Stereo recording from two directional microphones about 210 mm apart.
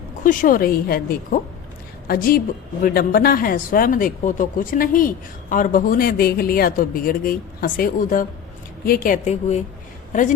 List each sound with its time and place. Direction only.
0.3 s a woman's voice: 40° left (ahead or behind)